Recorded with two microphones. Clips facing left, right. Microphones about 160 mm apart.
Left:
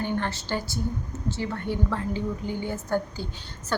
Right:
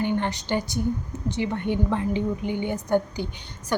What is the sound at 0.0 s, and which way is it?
A woman's voice, 15° right (ahead or behind).